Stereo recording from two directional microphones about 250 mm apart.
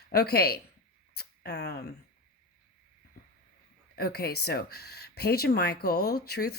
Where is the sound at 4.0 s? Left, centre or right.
Left.